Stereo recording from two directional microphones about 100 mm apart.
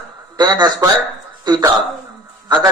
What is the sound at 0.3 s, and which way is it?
A man's voice, 45° right (ahead or behind).